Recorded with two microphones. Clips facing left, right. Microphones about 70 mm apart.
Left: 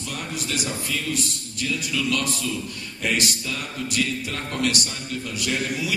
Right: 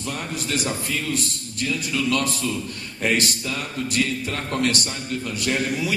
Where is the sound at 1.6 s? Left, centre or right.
Right.